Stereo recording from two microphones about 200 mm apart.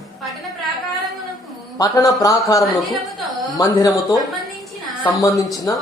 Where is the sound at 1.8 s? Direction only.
15° left (ahead or behind).